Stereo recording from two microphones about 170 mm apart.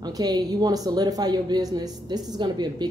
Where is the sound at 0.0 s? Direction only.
25° right (ahead or behind).